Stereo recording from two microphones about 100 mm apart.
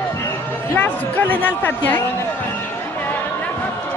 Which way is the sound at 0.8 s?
20° left (ahead or behind).